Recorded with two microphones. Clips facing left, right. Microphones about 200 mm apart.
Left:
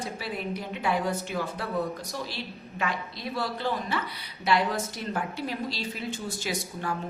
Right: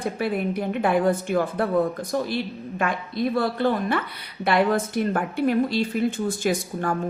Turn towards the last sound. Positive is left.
turn(degrees=-50)  # may be behind; listen again after turning